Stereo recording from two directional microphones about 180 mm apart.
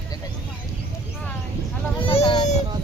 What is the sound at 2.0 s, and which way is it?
Speech, 30° left (ahead or behind).